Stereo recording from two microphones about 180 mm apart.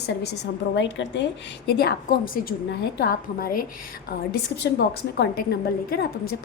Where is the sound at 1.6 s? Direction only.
55° left (ahead or behind).